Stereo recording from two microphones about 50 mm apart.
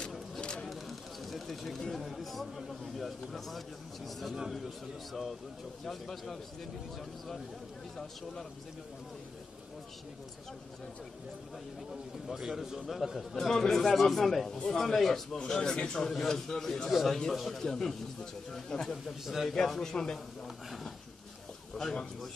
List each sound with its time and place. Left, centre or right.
0.4 s a sound: centre
0.7 s a sound: centre
2.0 s a man's voice: centre
11.9 s a man's voice: centre
14.6 s a man's voice: centre
14.9 s speech: centre
15.3 s a man's voice: centre
19.2 s speech: centre
19.5 s a man's voice: centre
21.7 s a man's voice: centre